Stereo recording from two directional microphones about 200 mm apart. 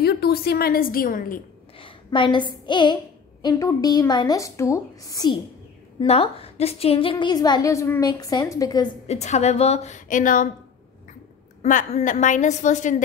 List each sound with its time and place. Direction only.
0.0 s a woman's voice: 50° left (ahead or behind)
1.8 s a sound: 25° left (ahead or behind)
2.6 s a woman's voice: 25° left (ahead or behind)
9.0 s a woman's voice: 35° left (ahead or behind)
11.6 s a woman's voice: 40° left (ahead or behind)